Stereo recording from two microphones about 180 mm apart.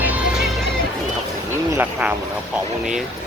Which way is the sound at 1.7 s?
10° right (ahead or behind).